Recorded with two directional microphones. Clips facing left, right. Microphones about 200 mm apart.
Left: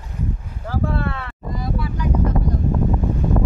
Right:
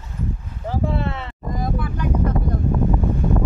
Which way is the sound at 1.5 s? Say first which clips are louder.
Right 1 dB; 50° right (ahead or behind).